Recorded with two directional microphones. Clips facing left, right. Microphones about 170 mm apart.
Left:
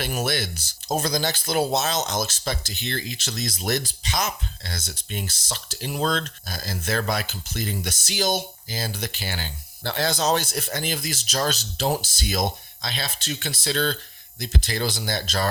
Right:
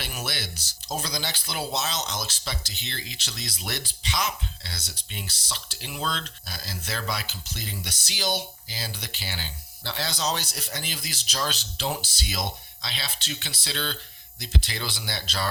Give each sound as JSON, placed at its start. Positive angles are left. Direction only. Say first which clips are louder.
{"t": 0.0, "sound": "speech", "louder": "left 8 dB", "side_deg": 45}